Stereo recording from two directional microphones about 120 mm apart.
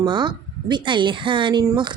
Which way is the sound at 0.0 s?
40° right (ahead or behind).